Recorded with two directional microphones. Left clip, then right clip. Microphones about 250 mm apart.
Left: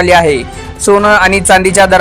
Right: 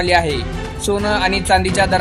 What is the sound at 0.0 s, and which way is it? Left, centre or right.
Speech, left.